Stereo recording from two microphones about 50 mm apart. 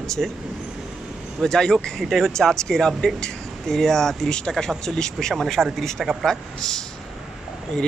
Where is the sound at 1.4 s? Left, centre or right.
Centre.